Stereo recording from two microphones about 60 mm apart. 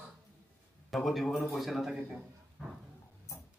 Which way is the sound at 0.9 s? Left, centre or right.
Centre.